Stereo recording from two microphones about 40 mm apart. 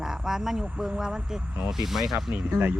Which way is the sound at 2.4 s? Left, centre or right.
Right.